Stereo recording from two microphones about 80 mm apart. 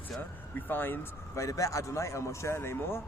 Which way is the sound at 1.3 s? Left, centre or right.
Left.